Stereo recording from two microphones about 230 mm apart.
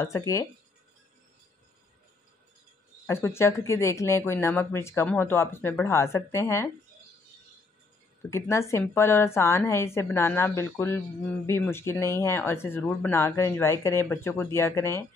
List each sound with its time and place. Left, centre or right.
3.1 s speech: centre
8.3 s speech: centre